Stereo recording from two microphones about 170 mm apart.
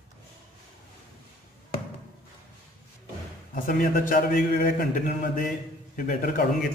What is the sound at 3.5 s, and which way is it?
A man's voice, 50° left (ahead or behind).